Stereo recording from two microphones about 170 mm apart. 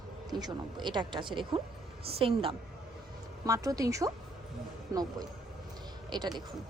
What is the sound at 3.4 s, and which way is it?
A woman's voice, 20° right (ahead or behind).